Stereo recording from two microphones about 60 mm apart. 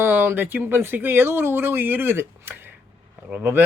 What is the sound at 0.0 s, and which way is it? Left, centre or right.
Speech, right.